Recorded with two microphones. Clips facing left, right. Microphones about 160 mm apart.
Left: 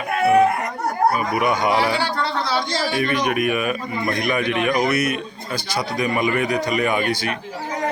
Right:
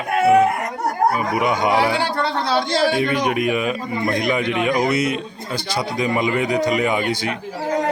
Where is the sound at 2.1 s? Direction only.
55° right (ahead or behind).